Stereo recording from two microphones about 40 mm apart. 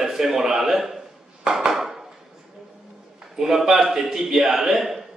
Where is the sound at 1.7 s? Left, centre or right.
Centre.